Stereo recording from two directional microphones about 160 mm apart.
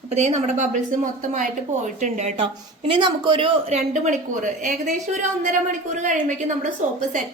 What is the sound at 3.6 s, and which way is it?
Speech, 45° right (ahead or behind).